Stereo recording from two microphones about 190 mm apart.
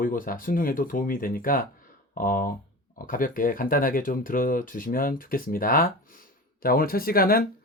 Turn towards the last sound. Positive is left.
turn(degrees=50)  # may be behind; listen again after turning